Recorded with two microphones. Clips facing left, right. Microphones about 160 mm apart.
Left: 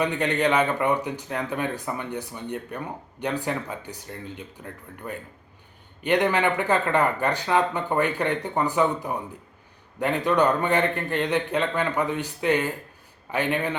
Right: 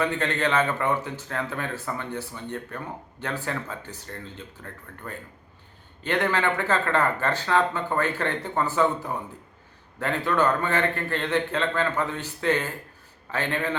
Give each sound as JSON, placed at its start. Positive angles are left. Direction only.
{"t": 0.0, "sound": "a man's voice", "side_deg": 15}